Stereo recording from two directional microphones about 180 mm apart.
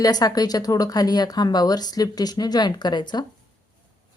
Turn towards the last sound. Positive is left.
turn(degrees=25)  # may be behind; listen again after turning